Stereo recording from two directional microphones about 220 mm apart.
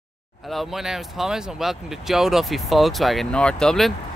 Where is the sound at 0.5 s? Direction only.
Centre (ahead or behind).